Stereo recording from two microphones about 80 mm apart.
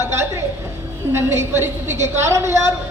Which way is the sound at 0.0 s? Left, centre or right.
Right.